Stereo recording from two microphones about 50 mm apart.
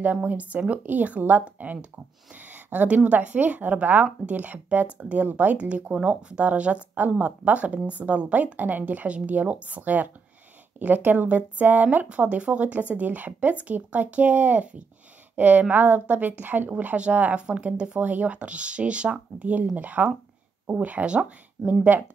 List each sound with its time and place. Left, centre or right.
0.0 s speech: right
16.7 s speech: right
18.0 s speech: right